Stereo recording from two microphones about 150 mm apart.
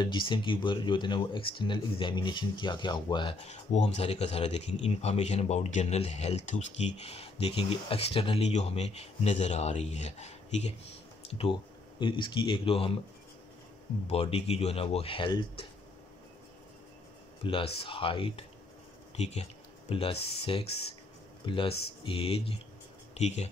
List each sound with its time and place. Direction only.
0.0 s speech: 30° left (ahead or behind)
3.4 s speech: 45° left (ahead or behind)
14.0 s speech: 40° left (ahead or behind)
17.4 s speech: 35° left (ahead or behind)